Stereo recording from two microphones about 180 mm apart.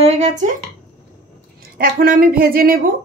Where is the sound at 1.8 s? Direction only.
50° right (ahead or behind).